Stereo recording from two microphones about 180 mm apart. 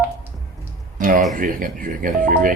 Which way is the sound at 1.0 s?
50° right (ahead or behind).